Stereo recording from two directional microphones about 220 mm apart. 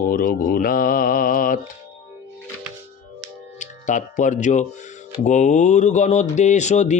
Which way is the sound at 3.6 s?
35° left (ahead or behind).